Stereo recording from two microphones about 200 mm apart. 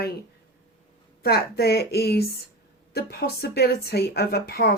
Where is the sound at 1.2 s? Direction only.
50° left (ahead or behind).